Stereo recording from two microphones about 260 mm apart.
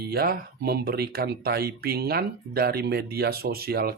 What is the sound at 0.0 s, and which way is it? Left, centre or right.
Speech, right.